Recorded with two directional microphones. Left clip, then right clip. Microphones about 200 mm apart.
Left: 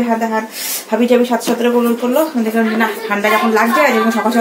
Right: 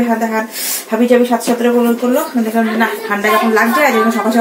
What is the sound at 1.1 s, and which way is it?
Speech, 15° left (ahead or behind).